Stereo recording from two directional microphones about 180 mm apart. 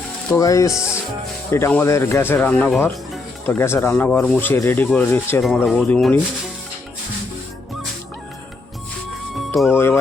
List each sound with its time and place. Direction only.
0.3 s speech: 20° left (ahead or behind); by 6.1 s 5° left (ahead or behind)
9.7 s speech: 15° left (ahead or behind)